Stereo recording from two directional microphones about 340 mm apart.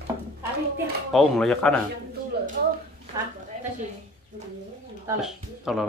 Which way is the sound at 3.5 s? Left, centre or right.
Right.